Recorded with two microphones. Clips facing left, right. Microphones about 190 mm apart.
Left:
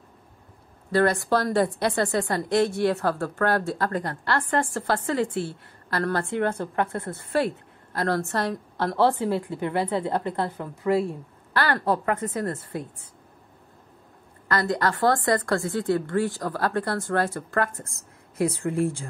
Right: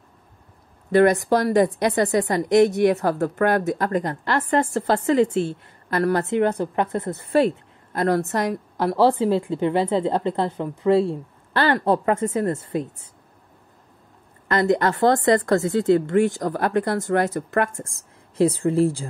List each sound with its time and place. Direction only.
0.9 s speech: 15° right (ahead or behind)
14.5 s speech: 20° right (ahead or behind)